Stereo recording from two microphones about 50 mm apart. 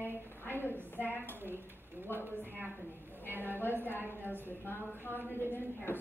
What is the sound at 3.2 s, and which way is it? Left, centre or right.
Speech, right.